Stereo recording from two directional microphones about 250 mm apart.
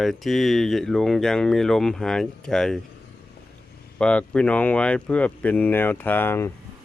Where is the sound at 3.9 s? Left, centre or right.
Centre.